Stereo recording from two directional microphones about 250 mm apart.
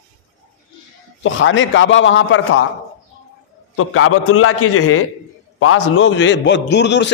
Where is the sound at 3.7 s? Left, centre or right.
Left.